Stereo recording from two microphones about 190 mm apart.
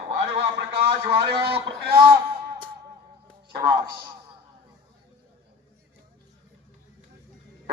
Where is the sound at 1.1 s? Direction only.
55° right (ahead or behind).